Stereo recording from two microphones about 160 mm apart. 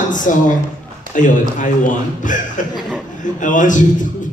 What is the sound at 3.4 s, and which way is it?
Speech, 55° left (ahead or behind).